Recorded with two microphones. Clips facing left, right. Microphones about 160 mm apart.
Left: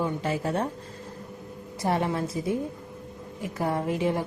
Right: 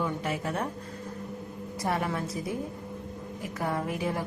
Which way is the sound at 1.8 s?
25° left (ahead or behind).